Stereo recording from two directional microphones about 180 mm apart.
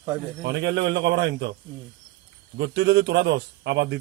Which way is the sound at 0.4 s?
75° right (ahead or behind).